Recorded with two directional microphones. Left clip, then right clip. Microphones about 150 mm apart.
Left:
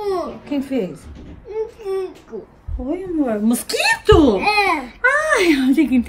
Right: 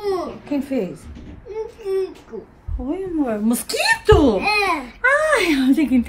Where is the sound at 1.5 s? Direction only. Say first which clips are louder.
Left 1 dB; 35° left (ahead or behind).